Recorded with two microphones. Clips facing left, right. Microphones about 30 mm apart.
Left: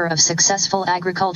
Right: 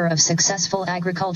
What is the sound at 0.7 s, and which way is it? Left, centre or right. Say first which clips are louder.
Speech: left 4 dB; left.